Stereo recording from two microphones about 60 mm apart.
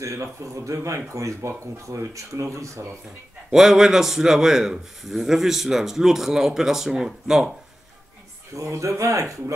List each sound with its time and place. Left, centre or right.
0.0 s speech: right
3.5 s a man's voice: centre
8.5 s speech: right